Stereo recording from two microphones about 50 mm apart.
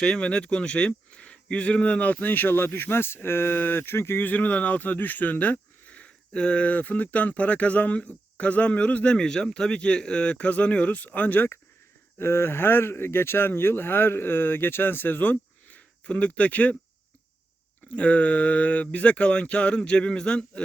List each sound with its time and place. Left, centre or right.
0.0 s speech: centre; by 4.2 s left
4.2 s speech: left
9.1 s speech: centre; by 11.4 s left
12.2 s speech: left
15.7 s speech: left
17.9 s speech: left